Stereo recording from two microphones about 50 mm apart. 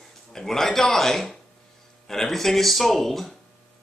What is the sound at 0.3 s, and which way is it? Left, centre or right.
A man's voice, centre.